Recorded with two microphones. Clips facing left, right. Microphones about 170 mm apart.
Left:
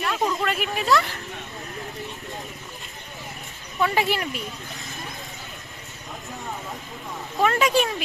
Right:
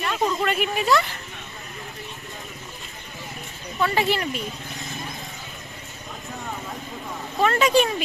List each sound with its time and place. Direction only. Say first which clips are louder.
0.0 s a sound: right 1 dB; centre (ahead or behind)
3.8 s speech: even; 5° left (ahead or behind)
7.3 s speech: right 2 dB; centre (ahead or behind)